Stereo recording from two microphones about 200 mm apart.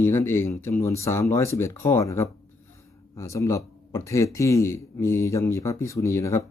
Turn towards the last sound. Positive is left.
turn(degrees=15)  # may be behind; listen again after turning